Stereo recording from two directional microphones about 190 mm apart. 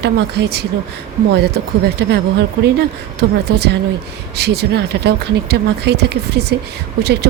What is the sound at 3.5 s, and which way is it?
Speech, 60° right (ahead or behind).